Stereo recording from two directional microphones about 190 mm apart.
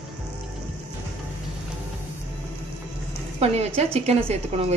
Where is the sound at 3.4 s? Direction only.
30° right (ahead or behind).